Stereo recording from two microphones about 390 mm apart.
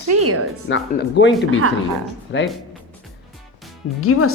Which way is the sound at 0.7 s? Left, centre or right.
Left.